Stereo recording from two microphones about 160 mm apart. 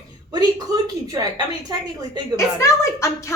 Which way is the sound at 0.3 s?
25° right (ahead or behind).